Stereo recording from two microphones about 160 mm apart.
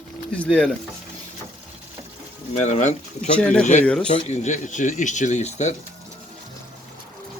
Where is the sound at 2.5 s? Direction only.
45° left (ahead or behind).